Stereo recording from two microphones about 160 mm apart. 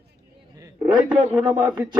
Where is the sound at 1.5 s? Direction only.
25° right (ahead or behind).